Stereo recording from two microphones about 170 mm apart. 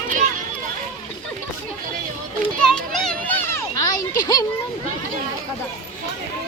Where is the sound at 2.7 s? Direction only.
5° left (ahead or behind); by 4.4 s 25° left (ahead or behind).